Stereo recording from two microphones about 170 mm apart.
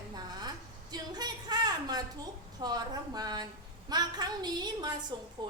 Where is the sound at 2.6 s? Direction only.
25° right (ahead or behind).